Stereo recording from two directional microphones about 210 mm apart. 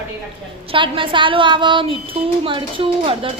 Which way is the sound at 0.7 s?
25° right (ahead or behind).